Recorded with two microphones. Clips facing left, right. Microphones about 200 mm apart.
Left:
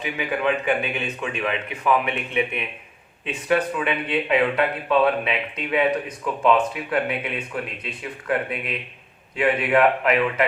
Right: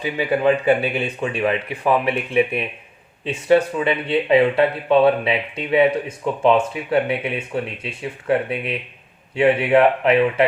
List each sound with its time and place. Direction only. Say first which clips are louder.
0.0 s speech: right 6 dB; 35° right (ahead or behind)